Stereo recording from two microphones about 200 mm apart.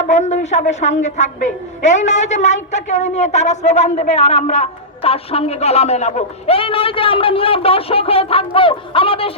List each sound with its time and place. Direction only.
0.0 s a woman's voice: 35° left (ahead or behind)